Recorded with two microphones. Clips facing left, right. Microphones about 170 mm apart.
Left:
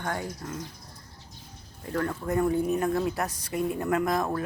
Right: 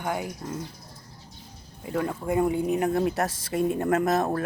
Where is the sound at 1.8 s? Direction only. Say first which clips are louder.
Right 1 dB; 10° right (ahead or behind).